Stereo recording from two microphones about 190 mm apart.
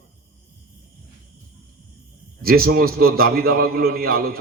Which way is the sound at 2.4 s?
50° right (ahead or behind).